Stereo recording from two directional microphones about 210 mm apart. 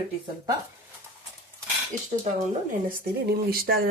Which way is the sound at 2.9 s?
45° right (ahead or behind).